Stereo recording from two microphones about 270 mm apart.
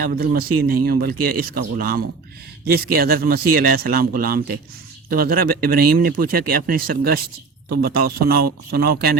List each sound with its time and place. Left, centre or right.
0.0 s speech: right